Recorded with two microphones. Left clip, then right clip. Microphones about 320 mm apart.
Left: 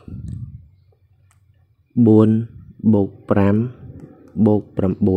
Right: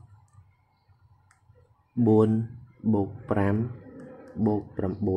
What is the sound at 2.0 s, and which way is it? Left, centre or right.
Speech, left.